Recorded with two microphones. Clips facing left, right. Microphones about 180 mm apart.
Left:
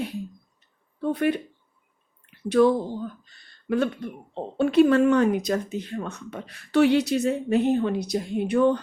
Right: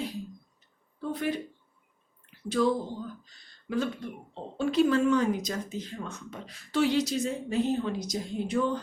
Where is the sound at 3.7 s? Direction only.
65° left (ahead or behind).